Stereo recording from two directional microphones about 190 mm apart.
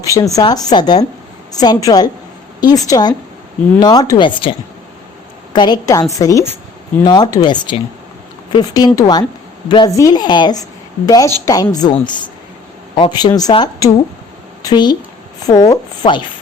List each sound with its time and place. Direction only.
0.0 s a woman's voice: 15° left (ahead or behind)
5.5 s a woman's voice: 20° left (ahead or behind)